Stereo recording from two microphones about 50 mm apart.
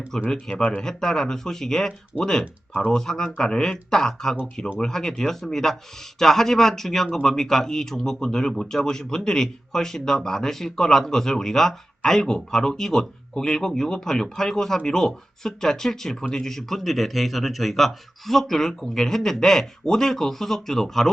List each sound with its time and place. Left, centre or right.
0.1 s speech: centre
2.1 s speech: left
2.9 s speech: centre